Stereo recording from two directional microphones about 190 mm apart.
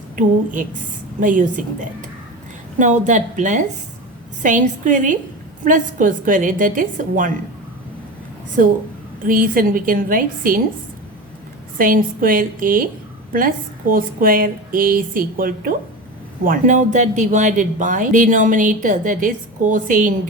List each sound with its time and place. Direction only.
0.2 s a woman's voice: 45° right (ahead or behind)
9.2 s speech: 45° right (ahead or behind)
11.8 s speech: 45° right (ahead or behind)
13.9 s speech: 50° right (ahead or behind)